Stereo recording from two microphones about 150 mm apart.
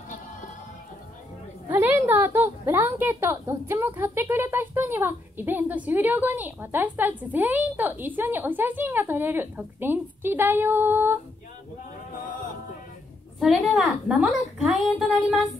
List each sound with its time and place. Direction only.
1.7 s a woman's voice: 10° right (ahead or behind)
12.1 s a sound: 65° left (ahead or behind)
13.4 s a woman's voice: centre (ahead or behind)